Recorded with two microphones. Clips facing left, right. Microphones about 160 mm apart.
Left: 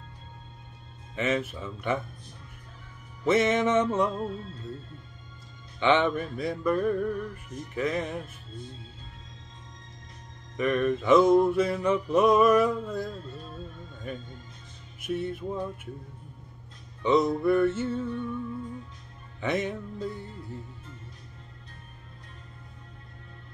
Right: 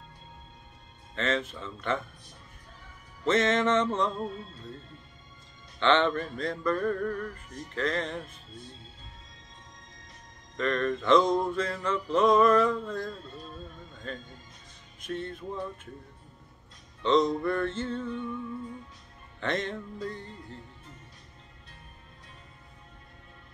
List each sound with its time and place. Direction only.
1.1 s music: 10° left (ahead or behind)
3.3 s music: 10° left (ahead or behind)
5.8 s music: 10° left (ahead or behind)
10.5 s music: 10° left (ahead or behind)
17.0 s music: 10° left (ahead or behind)
19.4 s music: 10° left (ahead or behind)